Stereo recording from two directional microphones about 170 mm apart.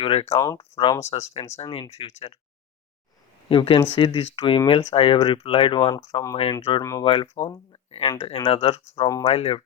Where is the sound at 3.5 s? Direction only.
30° left (ahead or behind).